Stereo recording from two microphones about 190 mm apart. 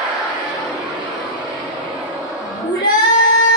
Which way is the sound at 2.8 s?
45° left (ahead or behind).